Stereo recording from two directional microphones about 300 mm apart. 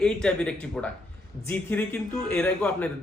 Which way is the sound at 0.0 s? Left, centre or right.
Centre.